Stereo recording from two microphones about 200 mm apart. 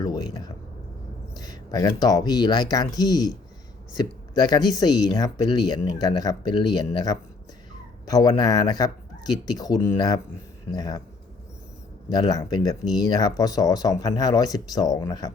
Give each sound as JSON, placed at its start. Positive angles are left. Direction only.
{"t": 0.0, "sound": "a sound", "side_deg": 20}
{"t": 1.4, "sound": "speech", "side_deg": 20}
{"t": 12.0, "sound": "speech", "side_deg": 20}